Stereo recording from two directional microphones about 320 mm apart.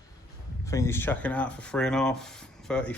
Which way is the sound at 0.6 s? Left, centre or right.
Centre.